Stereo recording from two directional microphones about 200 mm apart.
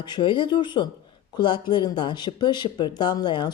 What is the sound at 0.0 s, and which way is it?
Speech, 25° left (ahead or behind).